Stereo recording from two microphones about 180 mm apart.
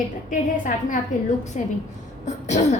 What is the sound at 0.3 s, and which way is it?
A woman's voice, 45° left (ahead or behind).